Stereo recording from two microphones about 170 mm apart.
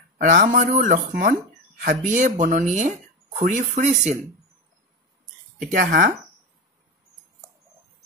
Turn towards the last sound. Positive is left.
turn(degrees=-60)  # may be behind; listen again after turning